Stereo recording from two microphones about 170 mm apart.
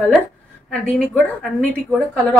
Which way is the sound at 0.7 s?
5° left (ahead or behind).